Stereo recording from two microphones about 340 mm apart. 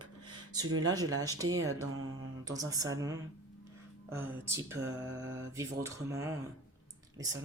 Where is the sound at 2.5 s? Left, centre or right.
Centre.